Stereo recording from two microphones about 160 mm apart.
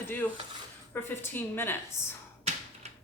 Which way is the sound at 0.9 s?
15° left (ahead or behind).